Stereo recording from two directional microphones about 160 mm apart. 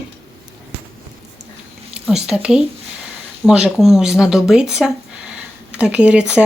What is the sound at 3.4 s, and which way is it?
Speech, 5° right (ahead or behind).